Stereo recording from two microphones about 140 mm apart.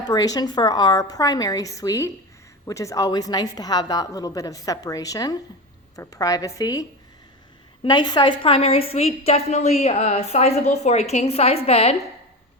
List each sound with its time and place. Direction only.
0.0 s a woman's voice: 30° left (ahead or behind)
7.9 s a woman's voice: 30° left (ahead or behind); by 11.9 s 45° left (ahead or behind)